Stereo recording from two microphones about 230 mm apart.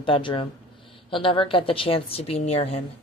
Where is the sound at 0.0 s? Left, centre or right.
Left.